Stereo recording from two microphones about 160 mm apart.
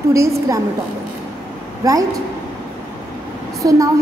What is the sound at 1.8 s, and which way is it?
Speech, 20° right (ahead or behind).